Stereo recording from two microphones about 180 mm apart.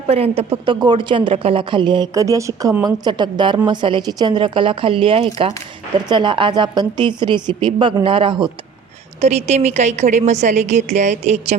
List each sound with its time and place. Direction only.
0.1 s a woman's voice: 30° right (ahead or behind)